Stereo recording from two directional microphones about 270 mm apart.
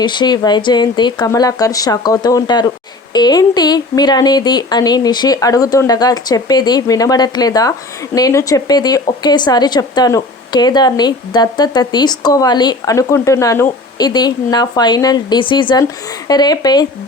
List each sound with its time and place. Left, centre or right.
0.0 s a woman's voice: centre